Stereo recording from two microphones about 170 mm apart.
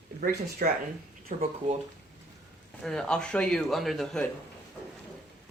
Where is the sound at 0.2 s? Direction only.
60° right (ahead or behind).